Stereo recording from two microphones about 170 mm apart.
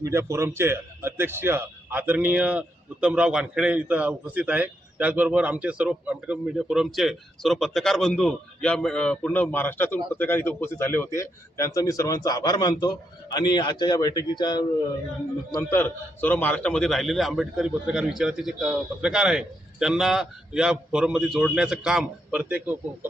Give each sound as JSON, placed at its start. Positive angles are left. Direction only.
{"t": 0.0, "sound": "a man's voice", "side_deg": -15}
{"t": 15.5, "sound": "a man's voice", "side_deg": 10}